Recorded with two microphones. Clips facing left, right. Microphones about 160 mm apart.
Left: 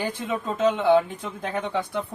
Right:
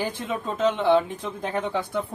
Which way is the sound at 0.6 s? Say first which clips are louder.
Left 1 dB; 5° left (ahead or behind).